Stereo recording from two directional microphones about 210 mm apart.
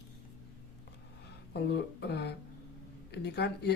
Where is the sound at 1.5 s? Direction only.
50° left (ahead or behind).